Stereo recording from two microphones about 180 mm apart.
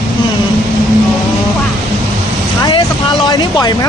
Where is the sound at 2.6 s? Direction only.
25° left (ahead or behind).